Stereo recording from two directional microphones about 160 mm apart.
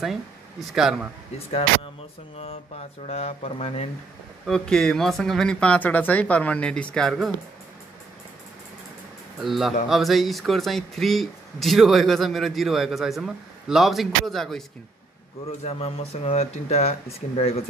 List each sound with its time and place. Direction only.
0.7 s speech: 5° right (ahead or behind)
2.3 s speech: 40° left (ahead or behind)
4.5 s speech: 5° left (ahead or behind)
9.4 s speech: centre (ahead or behind)
15.6 s speech: 40° left (ahead or behind)